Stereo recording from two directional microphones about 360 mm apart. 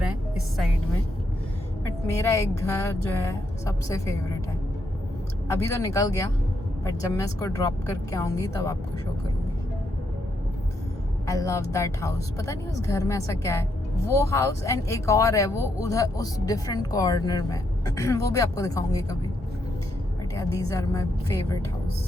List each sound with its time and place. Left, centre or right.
1.8 s a woman's voice: centre
5.5 s a woman's voice: centre
11.3 s a woman's voice: centre
20.3 s a woman's voice: centre